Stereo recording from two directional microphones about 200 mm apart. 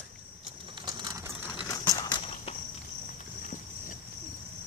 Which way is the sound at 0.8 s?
20° right (ahead or behind).